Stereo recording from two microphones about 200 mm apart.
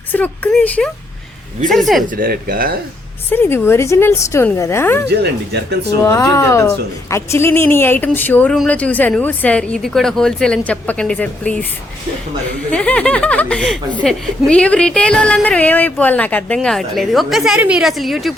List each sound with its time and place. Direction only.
0.1 s a woman's voice: 10° left (ahead or behind)
2.1 s speech: 50° right (ahead or behind)
3.2 s a woman's voice: 10° left (ahead or behind)
5.0 s speech: 55° right (ahead or behind)
6.0 s a woman's voice: 15° left (ahead or behind)
12.7 s speech: 5° left (ahead or behind)